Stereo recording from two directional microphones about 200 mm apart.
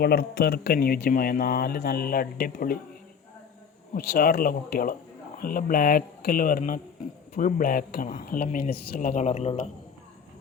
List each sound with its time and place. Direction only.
0.0 s speech: 50° left (ahead or behind)
3.9 s a woman's voice: 50° left (ahead or behind)